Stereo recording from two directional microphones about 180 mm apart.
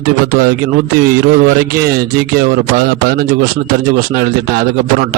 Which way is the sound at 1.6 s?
55° right (ahead or behind).